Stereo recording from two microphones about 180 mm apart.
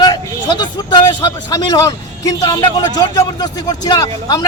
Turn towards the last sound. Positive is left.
turn(degrees=20)  # may be behind; listen again after turning